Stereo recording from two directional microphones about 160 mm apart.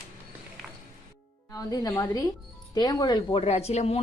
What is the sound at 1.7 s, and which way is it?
A woman's voice, 25° left (ahead or behind).